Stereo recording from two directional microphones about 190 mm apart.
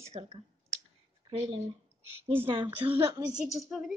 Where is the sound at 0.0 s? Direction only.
35° right (ahead or behind).